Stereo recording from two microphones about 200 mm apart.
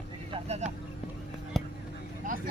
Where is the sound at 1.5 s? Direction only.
Centre (ahead or behind).